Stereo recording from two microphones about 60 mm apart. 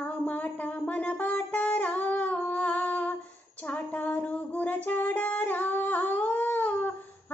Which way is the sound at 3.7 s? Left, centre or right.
Left.